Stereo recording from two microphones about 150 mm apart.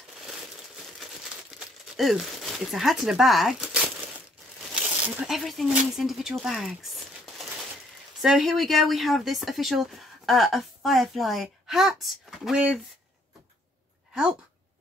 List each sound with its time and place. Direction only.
1.5 s speech: centre (ahead or behind)
5.0 s speech: 5° right (ahead or behind)